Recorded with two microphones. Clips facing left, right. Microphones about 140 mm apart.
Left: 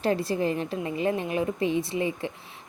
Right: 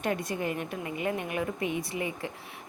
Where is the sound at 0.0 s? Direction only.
30° left (ahead or behind).